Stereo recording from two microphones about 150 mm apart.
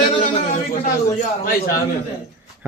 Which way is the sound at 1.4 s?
70° left (ahead or behind).